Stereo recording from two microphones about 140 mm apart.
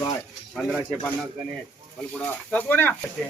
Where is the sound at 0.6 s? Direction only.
5° left (ahead or behind).